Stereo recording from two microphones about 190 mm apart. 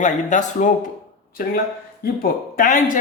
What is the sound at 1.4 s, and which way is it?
Speech, 50° left (ahead or behind).